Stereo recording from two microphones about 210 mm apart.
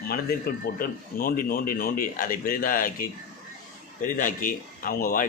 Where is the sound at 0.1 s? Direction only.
45° left (ahead or behind).